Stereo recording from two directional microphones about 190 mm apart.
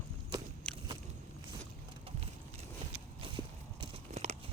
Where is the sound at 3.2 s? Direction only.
25° right (ahead or behind).